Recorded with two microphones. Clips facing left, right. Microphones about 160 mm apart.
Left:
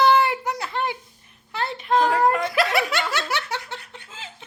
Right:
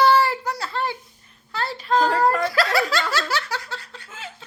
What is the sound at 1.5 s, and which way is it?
Speech, 20° left (ahead or behind).